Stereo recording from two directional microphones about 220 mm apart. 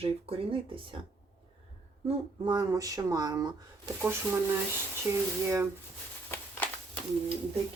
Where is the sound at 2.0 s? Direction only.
20° right (ahead or behind).